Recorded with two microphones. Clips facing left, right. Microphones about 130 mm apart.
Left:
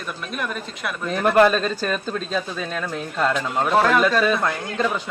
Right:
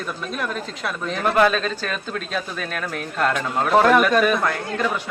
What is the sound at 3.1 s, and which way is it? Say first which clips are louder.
Speech: even; centre (ahead or behind).